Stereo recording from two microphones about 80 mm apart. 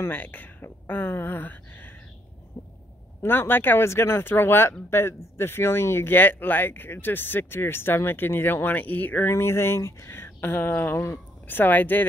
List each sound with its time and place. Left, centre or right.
0.0 s speech: left
2.6 s a sound: left
3.2 s speech: left